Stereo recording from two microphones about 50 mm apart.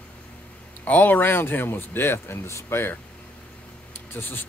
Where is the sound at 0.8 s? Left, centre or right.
Left.